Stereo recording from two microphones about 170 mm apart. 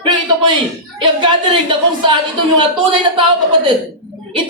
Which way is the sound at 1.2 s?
30° right (ahead or behind).